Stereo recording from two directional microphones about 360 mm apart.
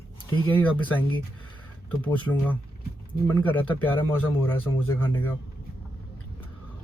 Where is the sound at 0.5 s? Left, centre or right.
Centre.